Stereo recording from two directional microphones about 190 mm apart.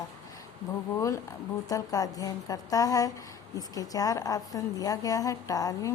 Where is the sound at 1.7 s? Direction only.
20° left (ahead or behind).